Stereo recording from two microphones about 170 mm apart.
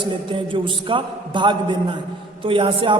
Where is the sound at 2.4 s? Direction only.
30° right (ahead or behind).